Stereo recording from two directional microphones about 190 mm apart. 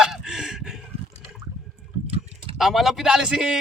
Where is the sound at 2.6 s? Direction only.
Centre (ahead or behind).